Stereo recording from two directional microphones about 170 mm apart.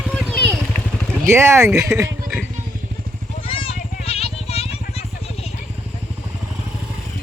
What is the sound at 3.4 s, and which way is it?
Vehicle, 35° left (ahead or behind).